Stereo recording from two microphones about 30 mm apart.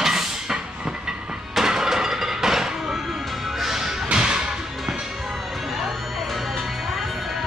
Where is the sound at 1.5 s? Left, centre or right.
Centre.